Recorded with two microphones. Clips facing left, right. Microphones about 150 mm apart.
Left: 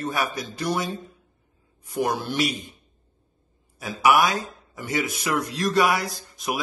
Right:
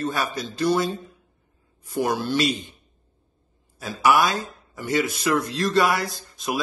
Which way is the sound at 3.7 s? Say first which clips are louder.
Even; 15° left (ahead or behind).